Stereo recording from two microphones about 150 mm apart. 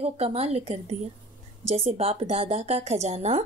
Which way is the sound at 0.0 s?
45° right (ahead or behind).